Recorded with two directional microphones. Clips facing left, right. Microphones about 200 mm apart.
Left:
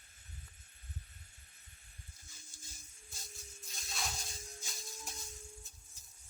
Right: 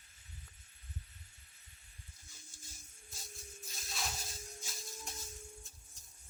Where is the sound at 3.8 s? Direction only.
Centre (ahead or behind).